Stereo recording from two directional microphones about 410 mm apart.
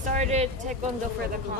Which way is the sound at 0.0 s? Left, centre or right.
Centre.